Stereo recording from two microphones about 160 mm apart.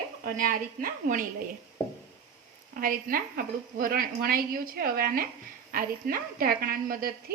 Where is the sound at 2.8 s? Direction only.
60° right (ahead or behind).